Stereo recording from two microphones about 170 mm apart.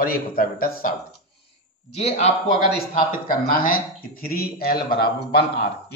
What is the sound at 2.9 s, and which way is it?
Speech, 55° left (ahead or behind).